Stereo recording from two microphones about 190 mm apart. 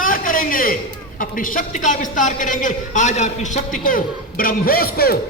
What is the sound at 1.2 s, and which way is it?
A man's voice, 45° left (ahead or behind).